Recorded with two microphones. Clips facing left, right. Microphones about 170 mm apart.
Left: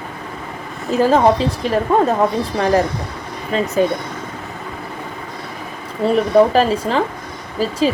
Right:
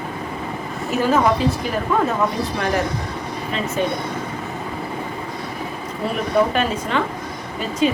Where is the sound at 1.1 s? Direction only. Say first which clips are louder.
Left 3 dB; 30° left (ahead or behind).